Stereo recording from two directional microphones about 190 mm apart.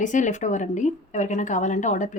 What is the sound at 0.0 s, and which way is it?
A woman's voice, 40° left (ahead or behind).